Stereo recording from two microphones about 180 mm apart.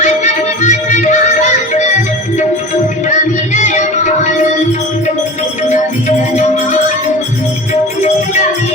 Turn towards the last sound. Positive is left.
turn(degrees=40)  # may be behind; listen again after turning